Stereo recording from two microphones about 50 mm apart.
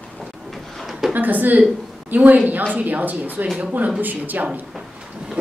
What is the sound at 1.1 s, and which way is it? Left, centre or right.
A woman's voice, right.